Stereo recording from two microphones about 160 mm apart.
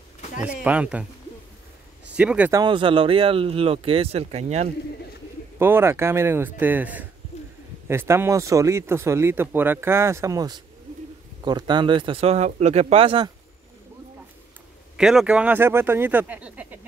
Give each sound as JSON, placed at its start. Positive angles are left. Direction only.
{"t": 0.5, "sound": "speech", "side_deg": -5}
{"t": 2.1, "sound": "speech", "side_deg": -10}
{"t": 2.5, "sound": "speech", "side_deg": -30}
{"t": 5.6, "sound": "speech", "side_deg": -15}
{"t": 15.0, "sound": "speech", "side_deg": -5}